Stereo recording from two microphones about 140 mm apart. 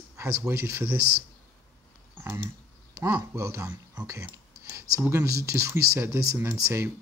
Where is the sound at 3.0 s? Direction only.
20° right (ahead or behind).